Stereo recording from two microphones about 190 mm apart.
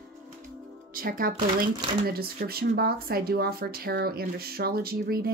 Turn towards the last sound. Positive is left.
turn(degrees=-50)  # may be behind; listen again after turning